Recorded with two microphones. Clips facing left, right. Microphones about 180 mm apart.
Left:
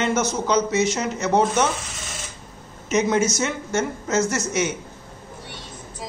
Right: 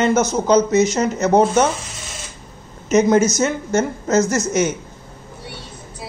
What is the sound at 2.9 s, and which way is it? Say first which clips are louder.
A man's voice: right 6 dB; 40° right (ahead or behind).